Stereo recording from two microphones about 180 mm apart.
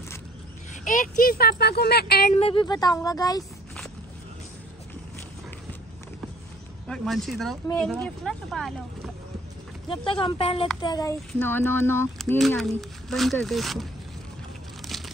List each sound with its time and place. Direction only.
0.8 s speech: 45° left (ahead or behind)
2.3 s speech: 30° left (ahead or behind)
6.9 s speech: centre (ahead or behind)
9.8 s speech: 30° left (ahead or behind); by 12.1 s 15° left (ahead or behind)
12.4 s speech: centre (ahead or behind)